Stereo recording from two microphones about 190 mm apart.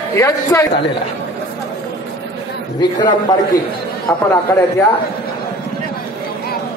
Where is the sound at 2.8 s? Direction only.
25° left (ahead or behind).